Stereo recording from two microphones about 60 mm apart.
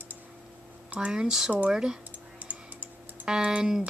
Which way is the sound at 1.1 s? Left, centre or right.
Centre.